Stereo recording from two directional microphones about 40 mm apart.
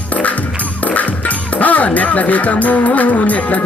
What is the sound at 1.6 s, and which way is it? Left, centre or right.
Music, left.